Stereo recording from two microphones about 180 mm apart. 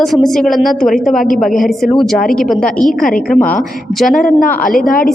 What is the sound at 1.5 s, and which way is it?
A woman's voice, centre (ahead or behind).